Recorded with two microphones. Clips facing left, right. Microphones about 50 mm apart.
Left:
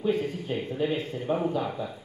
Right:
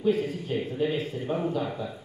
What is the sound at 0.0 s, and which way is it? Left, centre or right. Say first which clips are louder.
Speech: right 1 dB; centre.